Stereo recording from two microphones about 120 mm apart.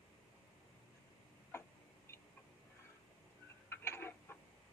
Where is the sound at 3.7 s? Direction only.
20° left (ahead or behind).